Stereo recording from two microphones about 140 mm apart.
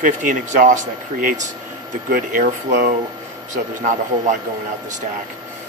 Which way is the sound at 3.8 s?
65° right (ahead or behind).